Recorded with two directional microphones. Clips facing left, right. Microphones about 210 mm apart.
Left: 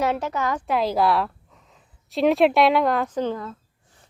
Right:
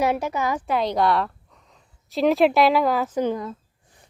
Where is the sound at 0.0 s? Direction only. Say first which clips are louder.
Right 1 dB; 10° right (ahead or behind).